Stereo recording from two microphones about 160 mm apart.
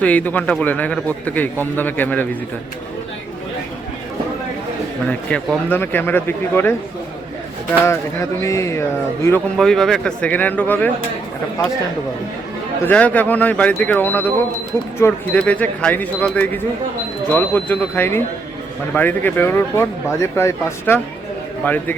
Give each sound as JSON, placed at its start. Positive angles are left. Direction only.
{"t": 0.0, "sound": "a man's voice", "side_deg": 10}
{"t": 5.3, "sound": "a man's voice", "side_deg": 10}
{"t": 7.9, "sound": "speech", "side_deg": 20}
{"t": 9.6, "sound": "a man's voice", "side_deg": 0}
{"t": 12.9, "sound": "a man's voice", "side_deg": 10}